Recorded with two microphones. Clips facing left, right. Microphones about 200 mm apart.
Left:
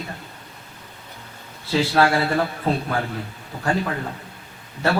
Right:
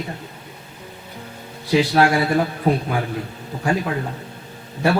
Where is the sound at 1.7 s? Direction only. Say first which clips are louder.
Right 2 dB; 15° right (ahead or behind).